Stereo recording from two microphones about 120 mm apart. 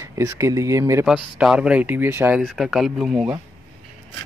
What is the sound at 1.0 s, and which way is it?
Speech, 5° right (ahead or behind).